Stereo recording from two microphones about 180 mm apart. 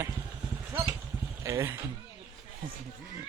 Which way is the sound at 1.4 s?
15° right (ahead or behind).